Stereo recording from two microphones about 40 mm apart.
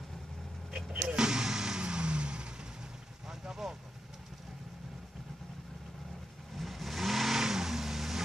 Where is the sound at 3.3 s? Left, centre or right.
Centre.